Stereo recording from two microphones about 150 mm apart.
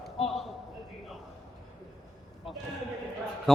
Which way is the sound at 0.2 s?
Centre (ahead or behind).